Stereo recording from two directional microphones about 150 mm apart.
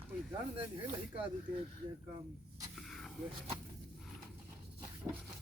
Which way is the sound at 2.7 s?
Centre (ahead or behind).